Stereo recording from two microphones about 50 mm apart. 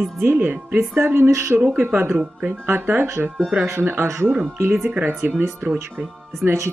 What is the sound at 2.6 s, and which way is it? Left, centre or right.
Speech, right.